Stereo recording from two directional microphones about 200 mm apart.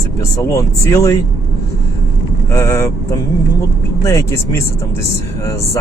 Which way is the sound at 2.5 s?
15° left (ahead or behind).